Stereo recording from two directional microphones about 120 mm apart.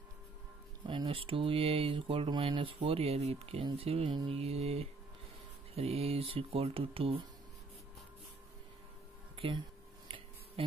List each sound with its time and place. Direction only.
0.8 s speech: 45° right (ahead or behind)
4.3 s mantra: 55° right (ahead or behind)
5.8 s speech: 60° right (ahead or behind)